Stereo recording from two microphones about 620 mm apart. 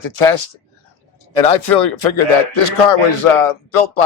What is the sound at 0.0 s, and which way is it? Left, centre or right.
Speech, left.